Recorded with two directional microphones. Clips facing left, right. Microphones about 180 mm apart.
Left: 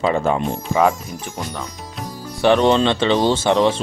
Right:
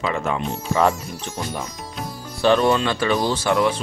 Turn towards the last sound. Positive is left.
turn(degrees=25)  # may be behind; listen again after turning